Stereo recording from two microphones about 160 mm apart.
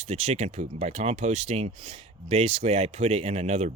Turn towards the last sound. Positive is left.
turn(degrees=-45)  # may be behind; listen again after turning